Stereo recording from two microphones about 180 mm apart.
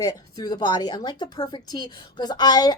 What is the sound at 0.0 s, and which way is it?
A woman's voice, 20° left (ahead or behind).